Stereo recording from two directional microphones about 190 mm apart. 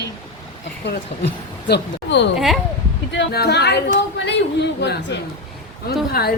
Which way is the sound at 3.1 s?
60° left (ahead or behind).